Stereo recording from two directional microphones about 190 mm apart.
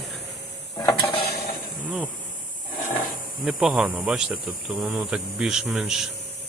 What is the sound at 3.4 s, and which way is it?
Speech, 5° right (ahead or behind).